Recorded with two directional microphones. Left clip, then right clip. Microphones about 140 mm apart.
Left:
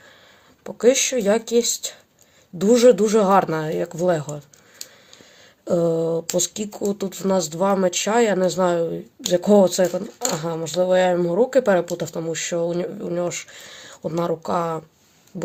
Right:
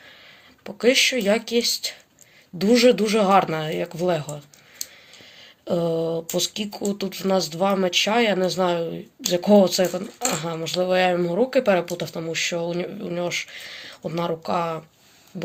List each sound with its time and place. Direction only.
0.6 s speech: 55° left (ahead or behind)
5.6 s a sound: 65° left (ahead or behind)
6.3 s speech: 70° left (ahead or behind)
9.9 s speech: 40° left (ahead or behind)
10.4 s speech: 60° left (ahead or behind)